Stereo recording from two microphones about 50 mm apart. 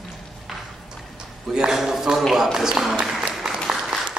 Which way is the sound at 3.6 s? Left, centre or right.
Centre.